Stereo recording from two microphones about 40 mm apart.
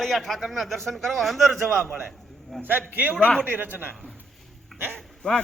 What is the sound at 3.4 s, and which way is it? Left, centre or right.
Speech, right.